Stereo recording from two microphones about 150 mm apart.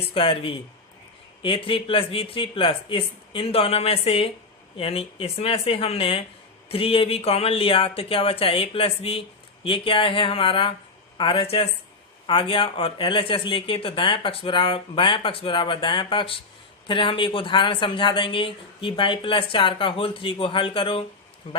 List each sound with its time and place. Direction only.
0.1 s speech: 35° left (ahead or behind)